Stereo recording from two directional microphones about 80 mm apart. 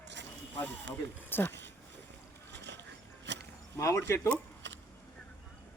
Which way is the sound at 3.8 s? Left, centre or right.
Left.